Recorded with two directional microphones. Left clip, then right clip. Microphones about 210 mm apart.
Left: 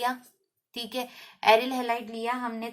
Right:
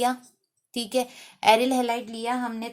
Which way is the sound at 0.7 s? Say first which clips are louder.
Right 7 dB; 55° right (ahead or behind).